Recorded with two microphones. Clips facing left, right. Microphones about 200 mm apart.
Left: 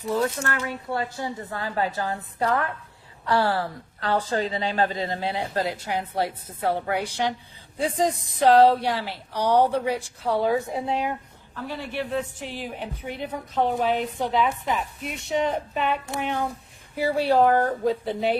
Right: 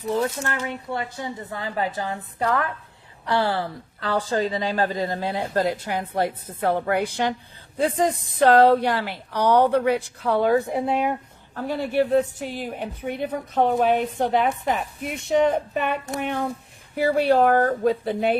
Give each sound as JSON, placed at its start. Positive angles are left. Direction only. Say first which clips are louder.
{"t": 0.1, "sound": "speech", "louder": "right 1 dB", "side_deg": -25}
{"t": 3.2, "sound": "speech", "louder": "even", "side_deg": -20}
{"t": 4.1, "sound": "a woman's voice", "louder": "right 2 dB", "side_deg": -35}
{"t": 11.5, "sound": "a woman's voice", "louder": "right 8 dB", "side_deg": -45}